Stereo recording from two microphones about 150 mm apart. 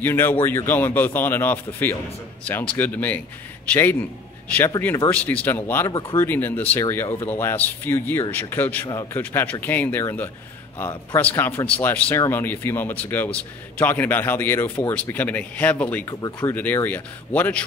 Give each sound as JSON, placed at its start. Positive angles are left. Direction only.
{"t": 0.0, "sound": "speech", "side_deg": 15}
{"t": 4.5, "sound": "speech", "side_deg": 15}
{"t": 16.1, "sound": "speech", "side_deg": 25}
{"t": 16.3, "sound": "speech", "side_deg": 10}